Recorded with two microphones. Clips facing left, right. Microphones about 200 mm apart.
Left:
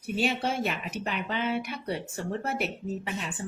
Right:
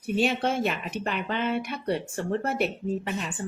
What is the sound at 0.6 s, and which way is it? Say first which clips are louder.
Speech: right 3 dB; 5° left (ahead or behind).